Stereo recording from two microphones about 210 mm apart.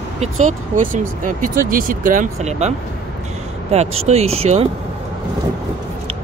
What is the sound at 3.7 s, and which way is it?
Speech, 30° right (ahead or behind).